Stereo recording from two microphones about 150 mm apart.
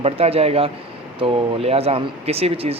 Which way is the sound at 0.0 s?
40° right (ahead or behind).